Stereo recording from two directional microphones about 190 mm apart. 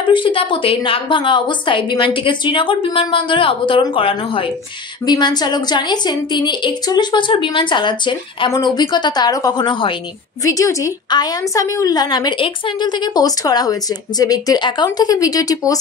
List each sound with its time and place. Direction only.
0.0 s a woman's voice: 25° left (ahead or behind)